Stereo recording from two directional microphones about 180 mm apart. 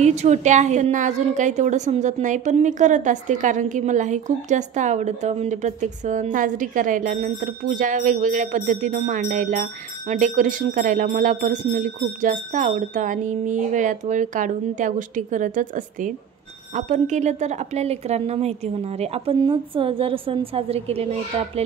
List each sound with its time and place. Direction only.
0.0 s a woman's voice: 40° right (ahead or behind)